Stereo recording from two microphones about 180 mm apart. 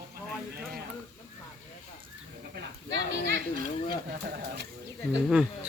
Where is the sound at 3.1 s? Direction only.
90° right.